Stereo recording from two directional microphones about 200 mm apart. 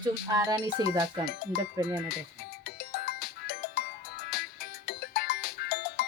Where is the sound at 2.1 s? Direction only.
50° left (ahead or behind).